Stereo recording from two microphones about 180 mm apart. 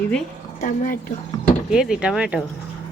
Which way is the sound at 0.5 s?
50° left (ahead or behind).